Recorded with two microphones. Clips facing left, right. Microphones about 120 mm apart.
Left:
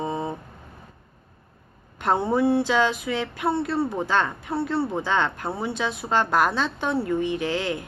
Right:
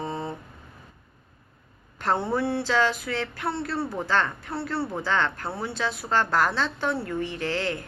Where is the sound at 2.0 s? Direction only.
15° left (ahead or behind).